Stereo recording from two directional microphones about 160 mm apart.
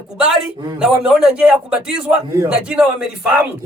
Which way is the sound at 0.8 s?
5° right (ahead or behind).